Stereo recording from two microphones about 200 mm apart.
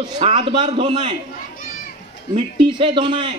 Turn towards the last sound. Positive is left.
turn(degrees=-25)  # may be behind; listen again after turning